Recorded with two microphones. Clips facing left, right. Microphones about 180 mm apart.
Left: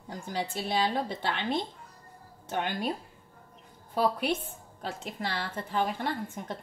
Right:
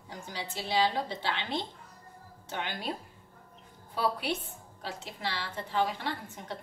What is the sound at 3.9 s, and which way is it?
A woman's voice, 50° left (ahead or behind).